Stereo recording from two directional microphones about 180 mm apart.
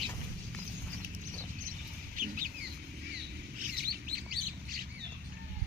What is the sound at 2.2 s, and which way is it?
Chicken, 50° right (ahead or behind).